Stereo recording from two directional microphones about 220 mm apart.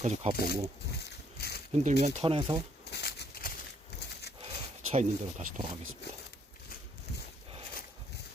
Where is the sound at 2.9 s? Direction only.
50° left (ahead or behind).